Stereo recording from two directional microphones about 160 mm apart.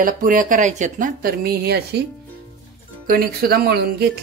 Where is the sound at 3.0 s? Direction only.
65° right (ahead or behind); by 4.0 s 80° right.